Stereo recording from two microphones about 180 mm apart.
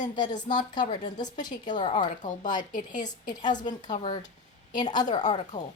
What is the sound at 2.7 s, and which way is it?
Speech, 45° left (ahead or behind).